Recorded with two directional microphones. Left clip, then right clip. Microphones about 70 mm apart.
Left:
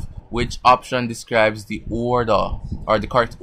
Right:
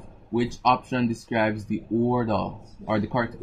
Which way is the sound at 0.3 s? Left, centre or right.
Left.